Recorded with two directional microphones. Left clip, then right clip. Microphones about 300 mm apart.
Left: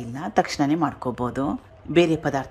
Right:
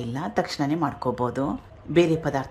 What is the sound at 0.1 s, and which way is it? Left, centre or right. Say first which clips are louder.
A woman's voice: left 5 dB; centre.